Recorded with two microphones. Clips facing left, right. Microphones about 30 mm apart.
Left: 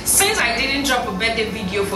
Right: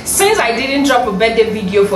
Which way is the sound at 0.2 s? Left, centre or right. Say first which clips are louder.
Right 6 dB; centre.